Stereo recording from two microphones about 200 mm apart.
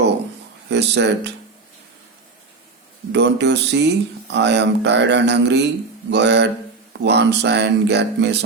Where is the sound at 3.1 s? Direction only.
60° right (ahead or behind).